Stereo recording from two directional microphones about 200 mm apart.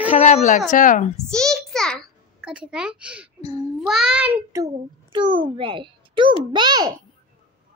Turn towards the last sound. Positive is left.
turn(degrees=-20)  # may be behind; listen again after turning